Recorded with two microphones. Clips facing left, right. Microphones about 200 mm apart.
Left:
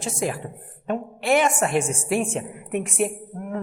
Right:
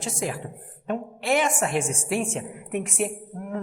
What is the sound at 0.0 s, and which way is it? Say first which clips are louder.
A woman's voice: left 3 dB; 60° left (ahead or behind).